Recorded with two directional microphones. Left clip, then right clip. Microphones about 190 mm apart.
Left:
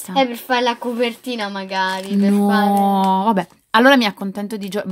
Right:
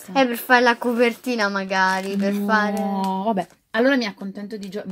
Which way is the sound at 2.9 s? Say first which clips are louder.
Left 7 dB; 35° left (ahead or behind).